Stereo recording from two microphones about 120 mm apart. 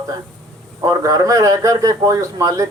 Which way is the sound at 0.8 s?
30° right (ahead or behind).